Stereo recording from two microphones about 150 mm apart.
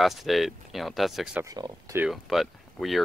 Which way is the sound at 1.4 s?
25° right (ahead or behind).